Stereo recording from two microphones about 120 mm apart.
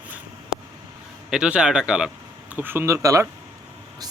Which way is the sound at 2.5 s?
15° right (ahead or behind).